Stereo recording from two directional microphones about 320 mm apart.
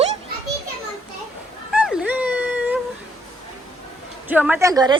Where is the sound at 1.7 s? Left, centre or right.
Centre.